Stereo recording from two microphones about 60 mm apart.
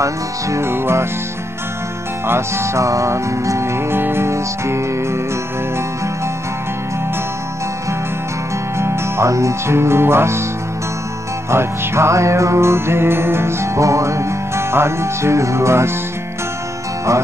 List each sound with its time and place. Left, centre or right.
0.0 s music: right
0.7 s music: right
2.2 s music: right
8.7 s music: right
11.5 s music: right